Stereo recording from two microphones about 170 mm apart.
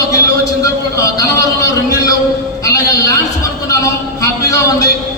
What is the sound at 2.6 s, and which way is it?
Music, 20° left (ahead or behind).